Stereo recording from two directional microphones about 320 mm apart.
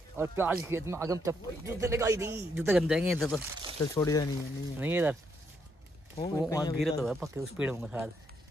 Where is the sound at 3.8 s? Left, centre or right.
Centre.